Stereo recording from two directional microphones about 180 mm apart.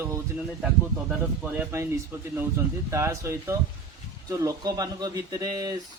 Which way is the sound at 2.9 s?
15° right (ahead or behind).